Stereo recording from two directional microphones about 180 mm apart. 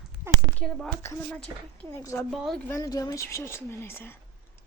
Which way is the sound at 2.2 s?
Centre (ahead or behind).